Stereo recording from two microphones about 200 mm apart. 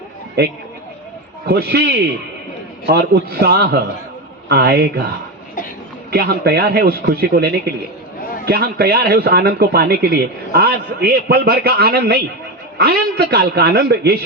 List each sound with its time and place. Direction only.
1.5 s a man's voice: 50° right (ahead or behind)
6.1 s a man's voice: 50° right (ahead or behind)